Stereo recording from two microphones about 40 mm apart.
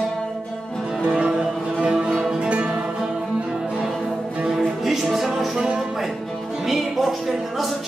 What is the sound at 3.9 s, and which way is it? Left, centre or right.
Music, centre.